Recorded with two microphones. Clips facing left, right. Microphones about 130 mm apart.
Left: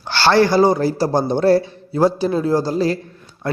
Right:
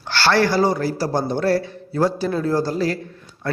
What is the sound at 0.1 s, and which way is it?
A man's voice, 20° left (ahead or behind).